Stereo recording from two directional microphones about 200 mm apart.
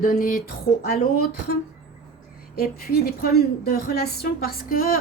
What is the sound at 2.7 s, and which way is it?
A woman's voice, 50° left (ahead or behind).